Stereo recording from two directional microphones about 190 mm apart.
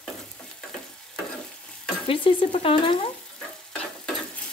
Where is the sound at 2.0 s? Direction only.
30° left (ahead or behind).